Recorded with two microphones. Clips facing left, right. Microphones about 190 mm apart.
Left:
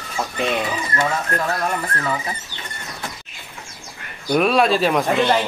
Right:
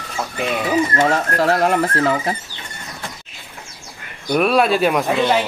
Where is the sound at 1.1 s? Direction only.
70° right (ahead or behind).